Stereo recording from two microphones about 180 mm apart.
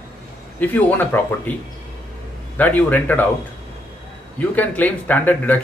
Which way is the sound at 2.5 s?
10° left (ahead or behind).